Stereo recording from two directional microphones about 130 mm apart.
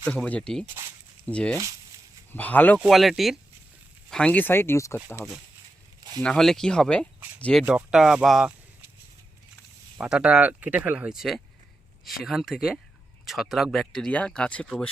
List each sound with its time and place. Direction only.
0.0 s speech: 10° left (ahead or behind)
2.8 s speech: centre (ahead or behind); by 4.9 s 20° left (ahead or behind)
6.2 s speech: 5° left (ahead or behind)
7.7 s speech: 5° right (ahead or behind)
10.0 s speech: 10° right (ahead or behind); by 14.8 s 10° left (ahead or behind)